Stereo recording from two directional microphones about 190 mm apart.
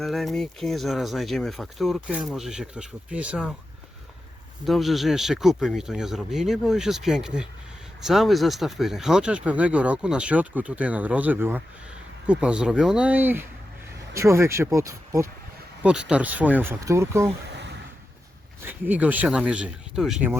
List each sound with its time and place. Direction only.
0.0 s speech: centre (ahead or behind)
4.6 s speech: centre (ahead or behind); by 15.3 s 15° right (ahead or behind)
15.8 s speech: 5° right (ahead or behind)
18.6 s speech: 10° right (ahead or behind)